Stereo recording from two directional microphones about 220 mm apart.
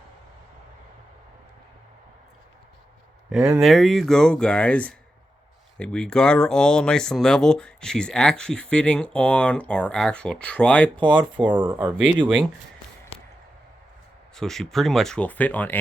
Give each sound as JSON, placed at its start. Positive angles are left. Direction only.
{"t": 3.6, "sound": "speech", "side_deg": 0}
{"t": 10.9, "sound": "speech", "side_deg": -20}
{"t": 11.5, "sound": "speech", "side_deg": -10}
{"t": 14.3, "sound": "speech", "side_deg": 0}